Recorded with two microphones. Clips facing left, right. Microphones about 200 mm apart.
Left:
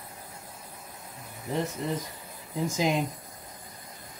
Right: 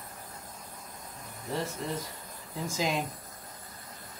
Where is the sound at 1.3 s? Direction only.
15° left (ahead or behind).